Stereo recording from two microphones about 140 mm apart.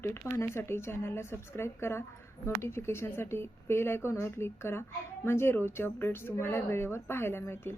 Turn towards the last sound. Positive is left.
turn(degrees=15)  # may be behind; listen again after turning